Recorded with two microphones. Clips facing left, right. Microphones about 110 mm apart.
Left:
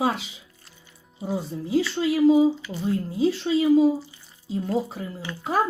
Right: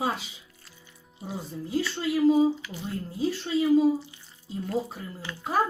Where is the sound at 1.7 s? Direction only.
90° left.